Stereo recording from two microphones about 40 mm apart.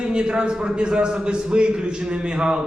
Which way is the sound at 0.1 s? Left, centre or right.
Right.